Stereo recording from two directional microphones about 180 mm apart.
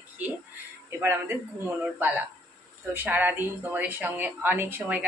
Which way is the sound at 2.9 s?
10° right (ahead or behind).